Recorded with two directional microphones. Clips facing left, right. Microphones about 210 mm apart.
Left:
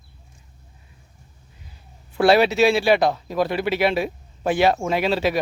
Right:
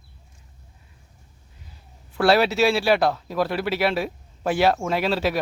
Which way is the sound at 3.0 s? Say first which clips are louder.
Left 1 dB; 15° left (ahead or behind).